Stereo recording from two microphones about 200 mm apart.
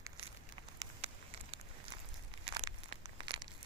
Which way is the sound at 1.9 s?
20° right (ahead or behind).